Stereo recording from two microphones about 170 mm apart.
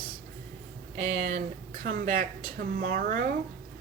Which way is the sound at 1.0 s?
55° right (ahead or behind).